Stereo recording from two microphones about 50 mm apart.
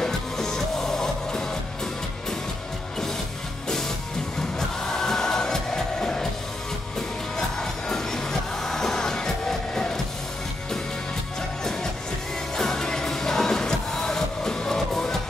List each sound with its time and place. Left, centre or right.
0.0 s music: centre
4.6 s music: centre
7.3 s music: centre
12.5 s music: centre